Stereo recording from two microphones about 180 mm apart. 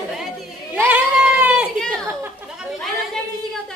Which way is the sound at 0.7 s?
10° right (ahead or behind).